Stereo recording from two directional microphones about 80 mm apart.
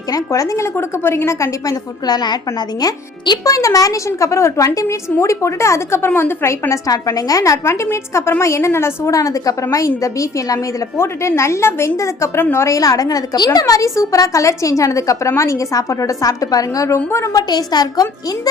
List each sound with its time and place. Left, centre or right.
0.1 s a woman's voice: left
9.1 s a woman's voice: left
12.4 s a woman's voice: left
12.6 s a woman's voice: left
17.3 s a woman's voice: left